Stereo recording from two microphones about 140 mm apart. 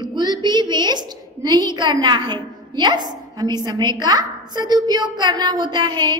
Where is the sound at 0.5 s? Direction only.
30° right (ahead or behind).